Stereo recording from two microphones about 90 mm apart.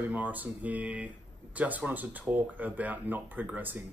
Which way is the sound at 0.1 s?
20° right (ahead or behind).